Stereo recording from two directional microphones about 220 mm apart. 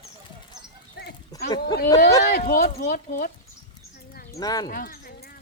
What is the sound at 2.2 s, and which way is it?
Speech, 45° left (ahead or behind).